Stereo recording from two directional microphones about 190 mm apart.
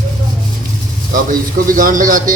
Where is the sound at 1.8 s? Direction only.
45° right (ahead or behind).